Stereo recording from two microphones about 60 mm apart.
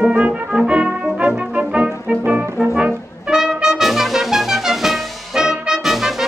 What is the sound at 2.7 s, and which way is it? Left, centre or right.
Trumpet, centre.